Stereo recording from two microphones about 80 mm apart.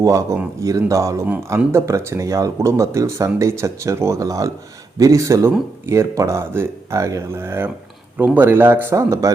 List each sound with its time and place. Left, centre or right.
0.0 s speech: right
9.0 s speech: right